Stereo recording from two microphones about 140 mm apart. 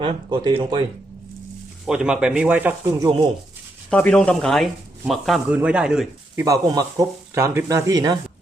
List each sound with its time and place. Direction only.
0.0 s speech: 35° right (ahead or behind)
1.9 s speech: 5° right (ahead or behind)
2.8 s speech: 25° right (ahead or behind)
3.8 s speech: 5° left (ahead or behind)
6.3 s speech: 25° right (ahead or behind)